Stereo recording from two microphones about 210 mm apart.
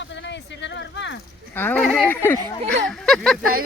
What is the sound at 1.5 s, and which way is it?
Speech, 10° left (ahead or behind).